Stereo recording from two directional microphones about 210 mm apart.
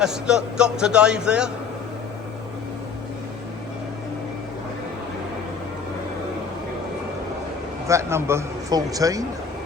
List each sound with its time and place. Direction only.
0.0 s a man's voice: 5° right (ahead or behind)
7.9 s speech: 15° right (ahead or behind)